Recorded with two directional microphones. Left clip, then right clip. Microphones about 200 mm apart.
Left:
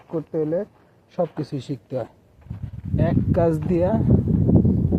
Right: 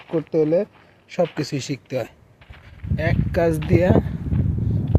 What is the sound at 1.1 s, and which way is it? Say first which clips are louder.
Speech: right 3 dB; 15° right (ahead or behind).